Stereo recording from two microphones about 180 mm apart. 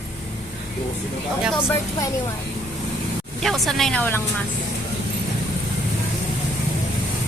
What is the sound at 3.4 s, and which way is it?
Speech, centre (ahead or behind).